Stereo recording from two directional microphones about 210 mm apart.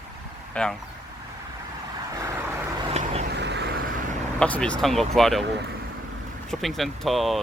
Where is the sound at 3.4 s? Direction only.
55° right (ahead or behind).